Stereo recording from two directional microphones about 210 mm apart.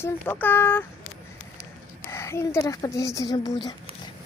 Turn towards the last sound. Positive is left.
turn(degrees=20)  # may be behind; listen again after turning